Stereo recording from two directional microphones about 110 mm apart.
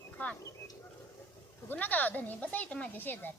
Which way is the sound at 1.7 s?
15° left (ahead or behind).